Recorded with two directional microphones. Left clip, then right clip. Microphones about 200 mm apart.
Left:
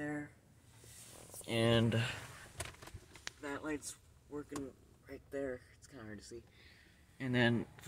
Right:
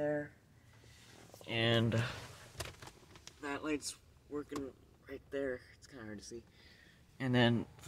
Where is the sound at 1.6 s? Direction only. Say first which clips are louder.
Even; 10° left (ahead or behind).